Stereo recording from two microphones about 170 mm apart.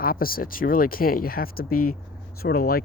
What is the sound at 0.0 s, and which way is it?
Speech, 60° left (ahead or behind).